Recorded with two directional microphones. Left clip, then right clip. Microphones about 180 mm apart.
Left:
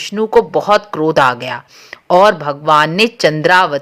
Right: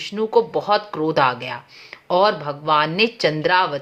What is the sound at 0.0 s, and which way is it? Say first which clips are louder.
Speech: left 6 dB; 35° left (ahead or behind).